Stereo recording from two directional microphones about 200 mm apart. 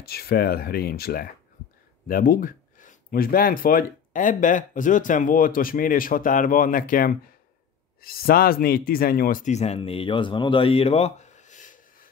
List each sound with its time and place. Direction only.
0.0 s speech: 50° left (ahead or behind)